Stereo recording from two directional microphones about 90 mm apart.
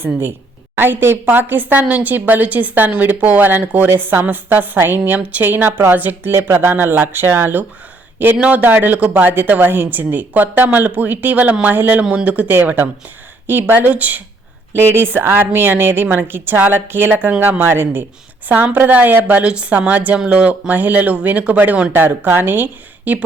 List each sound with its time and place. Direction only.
0.0 s a woman's voice: 25° right (ahead or behind)